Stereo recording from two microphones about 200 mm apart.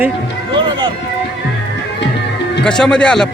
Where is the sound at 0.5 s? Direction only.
25° right (ahead or behind).